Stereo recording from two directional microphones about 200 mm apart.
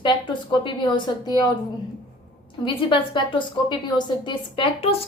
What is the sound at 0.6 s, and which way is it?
Speech, 25° left (ahead or behind).